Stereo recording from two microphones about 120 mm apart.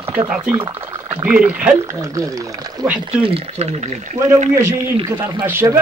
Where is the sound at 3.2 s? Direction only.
55° right (ahead or behind); by 4.1 s 75° right (ahead or behind).